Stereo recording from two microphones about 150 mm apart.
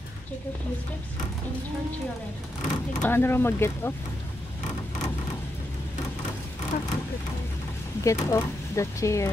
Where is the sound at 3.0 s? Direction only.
15° left (ahead or behind).